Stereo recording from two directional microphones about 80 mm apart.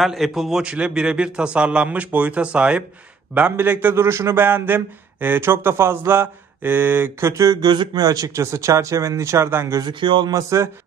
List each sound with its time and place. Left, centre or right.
0.0 s a man's voice: centre; by 3.9 s right
3.9 s speech: right
4.5 s speech: right
7.6 s speech: right
8.0 s speech: right
9.9 s speech: right
10.3 s speech: right